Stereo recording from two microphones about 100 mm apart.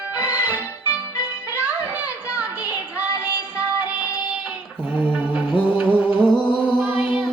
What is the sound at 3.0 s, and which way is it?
Music, 15° right (ahead or behind).